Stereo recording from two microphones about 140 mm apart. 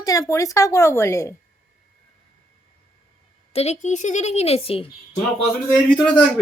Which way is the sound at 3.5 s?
50° left (ahead or behind).